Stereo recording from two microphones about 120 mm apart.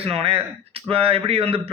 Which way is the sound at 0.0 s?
55° right (ahead or behind).